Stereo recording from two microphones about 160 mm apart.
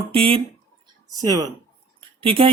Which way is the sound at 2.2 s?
35° right (ahead or behind).